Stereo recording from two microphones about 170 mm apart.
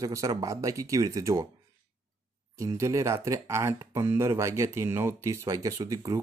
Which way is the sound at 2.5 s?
20° right (ahead or behind).